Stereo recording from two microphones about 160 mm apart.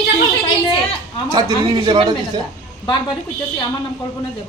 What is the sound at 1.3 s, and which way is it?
Speech, 25° right (ahead or behind).